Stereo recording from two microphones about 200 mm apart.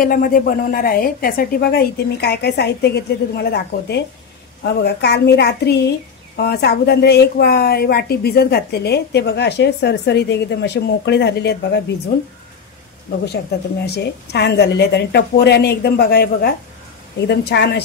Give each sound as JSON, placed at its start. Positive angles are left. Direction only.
{"t": 0.0, "sound": "a woman's voice", "side_deg": 45}
{"t": 13.8, "sound": "a woman's voice", "side_deg": 55}